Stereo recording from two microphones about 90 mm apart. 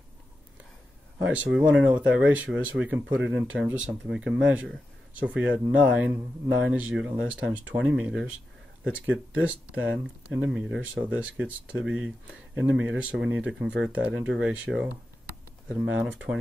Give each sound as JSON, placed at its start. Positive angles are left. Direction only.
{"t": 1.2, "sound": "speech", "side_deg": -15}
{"t": 7.7, "sound": "speech", "side_deg": -55}
{"t": 8.1, "sound": "speech", "side_deg": -5}
{"t": 16.0, "sound": "speech", "side_deg": -15}